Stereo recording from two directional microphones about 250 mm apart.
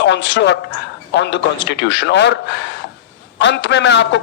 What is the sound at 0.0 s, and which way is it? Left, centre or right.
Speech, left.